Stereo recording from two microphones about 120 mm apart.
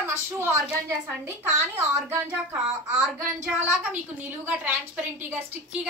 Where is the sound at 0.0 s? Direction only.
20° right (ahead or behind).